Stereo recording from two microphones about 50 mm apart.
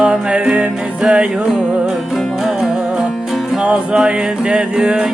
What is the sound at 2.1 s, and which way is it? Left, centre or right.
Music, centre.